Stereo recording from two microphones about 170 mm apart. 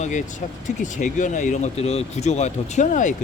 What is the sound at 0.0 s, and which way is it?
Speech, 45° left (ahead or behind).